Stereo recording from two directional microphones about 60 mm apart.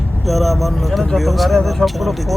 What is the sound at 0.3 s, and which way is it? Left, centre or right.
Speech, centre.